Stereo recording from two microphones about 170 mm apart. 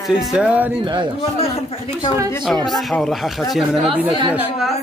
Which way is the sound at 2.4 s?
Centre (ahead or behind).